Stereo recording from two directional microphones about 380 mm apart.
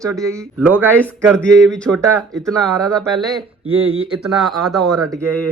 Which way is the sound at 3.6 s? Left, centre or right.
Right.